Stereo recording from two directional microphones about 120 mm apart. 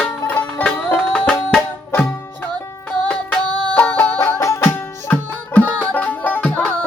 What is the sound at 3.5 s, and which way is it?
Music, 40° right (ahead or behind).